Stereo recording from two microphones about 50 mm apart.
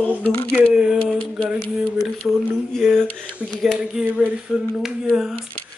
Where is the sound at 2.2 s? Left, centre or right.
Centre.